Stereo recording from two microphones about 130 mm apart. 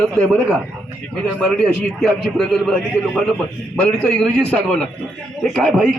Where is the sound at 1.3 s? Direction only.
5° left (ahead or behind).